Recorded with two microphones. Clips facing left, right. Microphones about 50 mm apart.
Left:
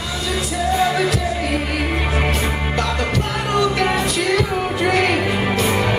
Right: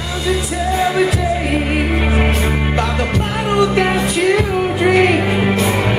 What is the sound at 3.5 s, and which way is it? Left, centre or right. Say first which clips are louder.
Music: right 3 dB; right.